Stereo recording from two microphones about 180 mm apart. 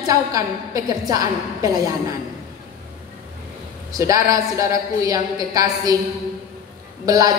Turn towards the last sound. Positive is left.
turn(degrees=-20)  # may be behind; listen again after turning